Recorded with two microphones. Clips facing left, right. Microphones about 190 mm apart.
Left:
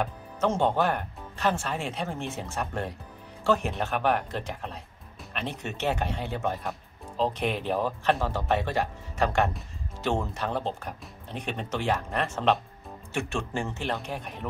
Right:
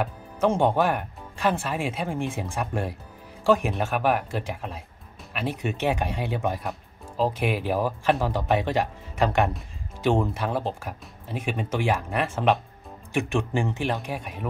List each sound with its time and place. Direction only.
0.0 s speech: 15° right (ahead or behind)